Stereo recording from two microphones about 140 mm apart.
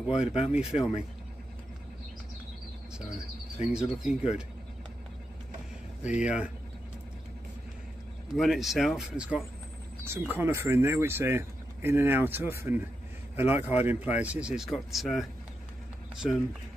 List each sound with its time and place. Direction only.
0.0 s speech: 5° right (ahead or behind)
3.6 s speech: 5° right (ahead or behind)
6.0 s speech: 10° right (ahead or behind)
8.4 s speech: centre (ahead or behind)
16.2 s speech: centre (ahead or behind)